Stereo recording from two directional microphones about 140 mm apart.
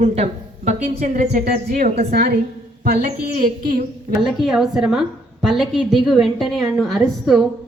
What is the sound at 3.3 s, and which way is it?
Speech, 90° right.